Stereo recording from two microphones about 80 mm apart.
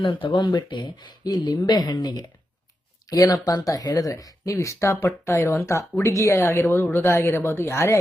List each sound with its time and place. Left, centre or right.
0.0 s speech: left